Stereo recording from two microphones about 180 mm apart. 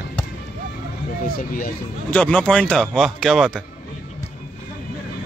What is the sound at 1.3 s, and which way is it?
Speech, 50° left (ahead or behind).